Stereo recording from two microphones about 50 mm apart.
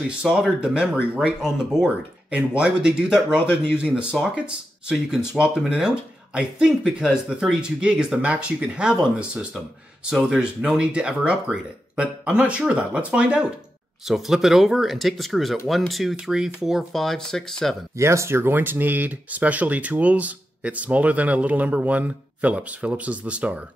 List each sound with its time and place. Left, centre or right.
0.2 s speech: right
2.3 s speech: right
14.0 s speech: centre
16.2 s speech: centre
16.9 s speech: centre
17.9 s speech: right
18.4 s speech: right